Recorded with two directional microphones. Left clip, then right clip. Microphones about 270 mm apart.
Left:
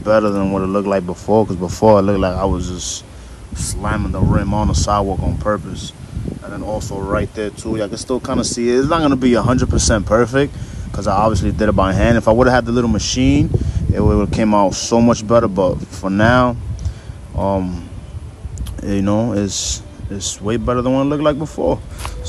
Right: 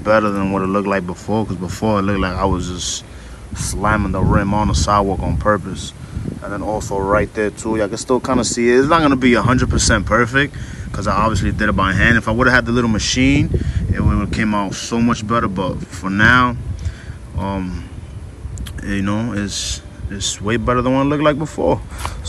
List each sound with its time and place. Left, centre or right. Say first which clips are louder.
0.0 s speech: left 1 dB; centre
18.8 s speech: left 4 dB; left